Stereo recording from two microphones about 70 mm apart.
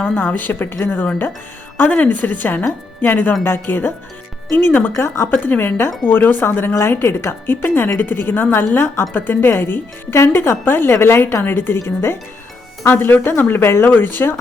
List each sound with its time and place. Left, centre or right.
0.0 s speech: left
12.9 s speech: left